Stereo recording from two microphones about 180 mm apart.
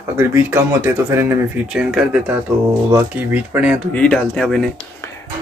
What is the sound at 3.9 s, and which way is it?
Speech, 5° left (ahead or behind).